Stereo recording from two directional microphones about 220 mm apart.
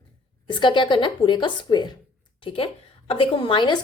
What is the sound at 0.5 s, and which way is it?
A woman's voice, 20° left (ahead or behind).